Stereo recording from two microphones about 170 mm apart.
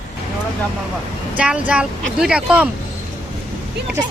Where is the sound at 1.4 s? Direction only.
5° right (ahead or behind).